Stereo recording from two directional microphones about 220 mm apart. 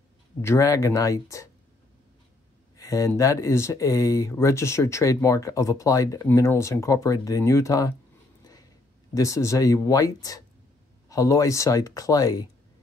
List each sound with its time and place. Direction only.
0.4 s speech: 15° left (ahead or behind)
2.8 s speech: 15° left (ahead or behind)
9.1 s speech: 15° left (ahead or behind)